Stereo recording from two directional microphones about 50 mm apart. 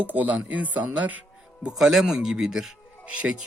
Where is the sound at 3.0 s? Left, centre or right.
Right.